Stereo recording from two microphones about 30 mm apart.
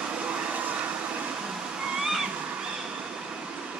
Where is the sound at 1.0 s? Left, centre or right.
Right.